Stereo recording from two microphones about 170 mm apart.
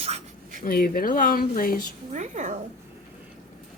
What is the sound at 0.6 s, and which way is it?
Speech, 60° left (ahead or behind).